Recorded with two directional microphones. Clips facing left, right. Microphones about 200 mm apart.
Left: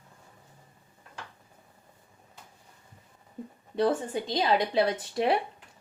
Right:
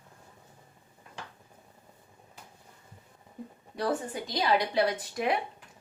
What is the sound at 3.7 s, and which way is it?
A woman's voice, 25° left (ahead or behind).